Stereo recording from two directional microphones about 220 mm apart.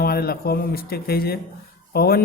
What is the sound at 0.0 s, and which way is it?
A man's voice, 45° left (ahead or behind).